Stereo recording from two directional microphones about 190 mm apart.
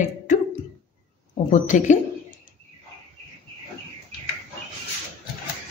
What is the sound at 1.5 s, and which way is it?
Speech, 40° left (ahead or behind).